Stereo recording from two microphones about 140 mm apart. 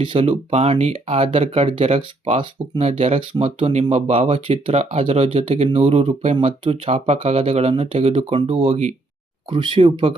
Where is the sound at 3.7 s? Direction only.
55° right (ahead or behind).